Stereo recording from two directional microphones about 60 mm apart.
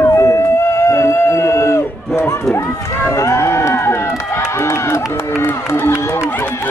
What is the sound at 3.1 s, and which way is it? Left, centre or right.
Speech, left.